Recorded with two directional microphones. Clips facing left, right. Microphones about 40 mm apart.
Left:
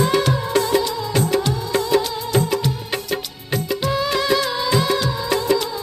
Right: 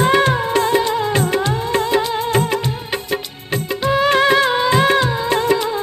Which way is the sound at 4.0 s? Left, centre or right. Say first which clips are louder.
Right 8 dB; right.